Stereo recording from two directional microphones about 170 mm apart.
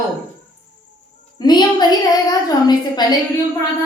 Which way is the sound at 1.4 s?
25° left (ahead or behind).